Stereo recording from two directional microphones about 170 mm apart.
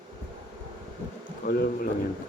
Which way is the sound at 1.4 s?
60° left (ahead or behind).